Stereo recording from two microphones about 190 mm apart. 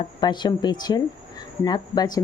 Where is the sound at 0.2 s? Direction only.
25° left (ahead or behind).